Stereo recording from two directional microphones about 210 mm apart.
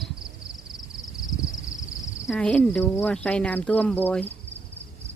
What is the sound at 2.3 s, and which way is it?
Speech, 10° left (ahead or behind).